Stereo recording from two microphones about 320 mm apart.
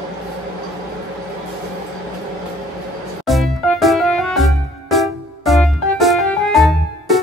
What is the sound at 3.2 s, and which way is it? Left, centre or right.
Music, centre.